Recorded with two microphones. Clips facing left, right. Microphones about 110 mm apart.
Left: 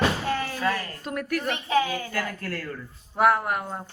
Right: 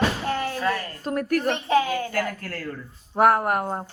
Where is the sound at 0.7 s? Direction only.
35° right (ahead or behind).